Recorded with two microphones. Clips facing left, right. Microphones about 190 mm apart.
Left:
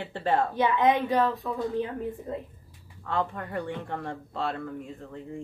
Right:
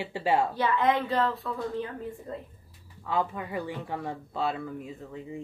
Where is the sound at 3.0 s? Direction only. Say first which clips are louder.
Even; 5° right (ahead or behind).